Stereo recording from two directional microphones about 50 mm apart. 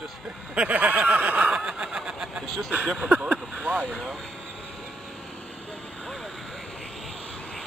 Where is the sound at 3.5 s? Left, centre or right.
Right.